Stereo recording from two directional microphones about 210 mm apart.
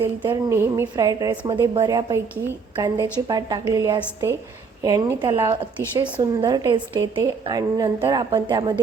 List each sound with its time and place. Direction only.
0.2 s a woman's voice: 15° right (ahead or behind)